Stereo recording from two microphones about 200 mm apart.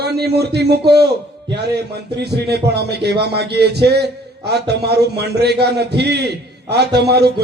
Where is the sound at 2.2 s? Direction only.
55° right (ahead or behind).